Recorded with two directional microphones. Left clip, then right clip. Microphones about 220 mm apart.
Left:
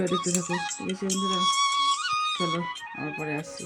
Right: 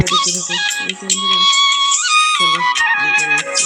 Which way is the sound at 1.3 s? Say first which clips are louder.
Right 12 dB; 30° right (ahead or behind).